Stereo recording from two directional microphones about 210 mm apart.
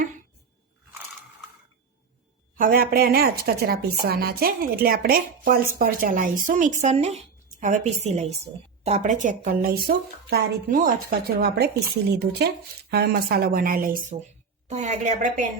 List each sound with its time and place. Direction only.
2.6 s a woman's voice: 40° right (ahead or behind)